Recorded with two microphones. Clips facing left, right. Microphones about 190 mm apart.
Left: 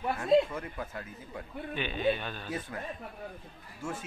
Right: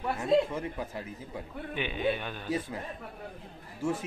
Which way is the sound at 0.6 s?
15° right (ahead or behind).